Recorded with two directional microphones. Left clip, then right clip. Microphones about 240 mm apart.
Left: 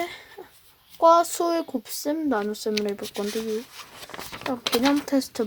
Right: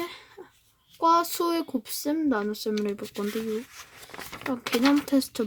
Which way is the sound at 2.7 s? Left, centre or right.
Left.